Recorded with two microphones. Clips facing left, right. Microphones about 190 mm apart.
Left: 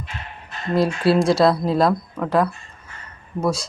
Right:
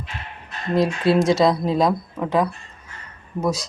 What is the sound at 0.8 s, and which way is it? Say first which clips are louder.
Speech: even; 5° left (ahead or behind).